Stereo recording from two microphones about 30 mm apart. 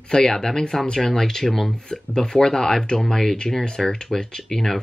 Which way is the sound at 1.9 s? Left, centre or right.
Left.